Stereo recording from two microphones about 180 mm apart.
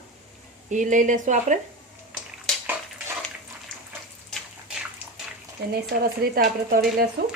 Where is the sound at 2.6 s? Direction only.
10° right (ahead or behind).